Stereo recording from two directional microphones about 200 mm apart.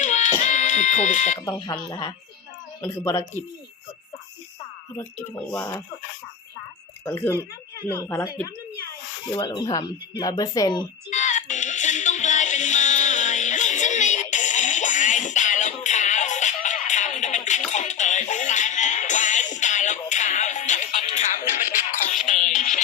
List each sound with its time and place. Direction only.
0.0 s a sound: 35° left (ahead or behind)
1.5 s speech: 20° left (ahead or behind)
4.9 s speech: 10° left (ahead or behind)
7.0 s speech: 10° left (ahead or behind)
11.1 s music: 35° left (ahead or behind)